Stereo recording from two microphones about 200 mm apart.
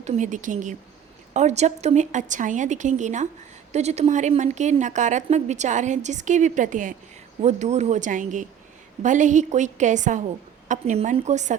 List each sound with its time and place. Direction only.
0.0 s speech: 35° right (ahead or behind)